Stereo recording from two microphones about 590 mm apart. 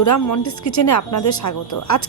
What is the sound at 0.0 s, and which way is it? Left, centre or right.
Speech, left.